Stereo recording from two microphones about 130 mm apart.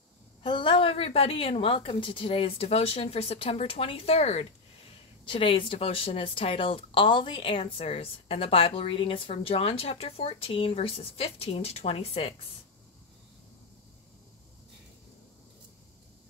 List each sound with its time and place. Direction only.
0.4 s a woman's voice: 40° left (ahead or behind)
5.2 s a woman's voice: 40° left (ahead or behind)